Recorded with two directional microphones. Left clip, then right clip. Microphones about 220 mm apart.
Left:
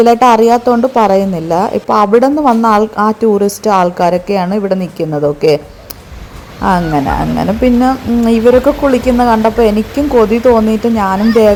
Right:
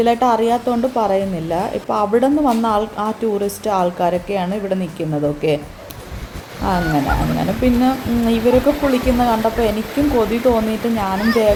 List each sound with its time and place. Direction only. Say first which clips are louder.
0.0 s a woman's voice: left 8 dB; 30° left (ahead or behind)
6.6 s a woman's voice: left 6 dB; 30° left (ahead or behind)